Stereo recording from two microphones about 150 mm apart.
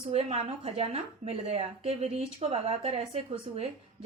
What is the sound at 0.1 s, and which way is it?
A woman's voice, 45° right (ahead or behind).